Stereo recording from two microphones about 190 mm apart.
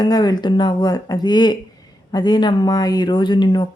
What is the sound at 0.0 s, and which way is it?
Speech, 20° left (ahead or behind).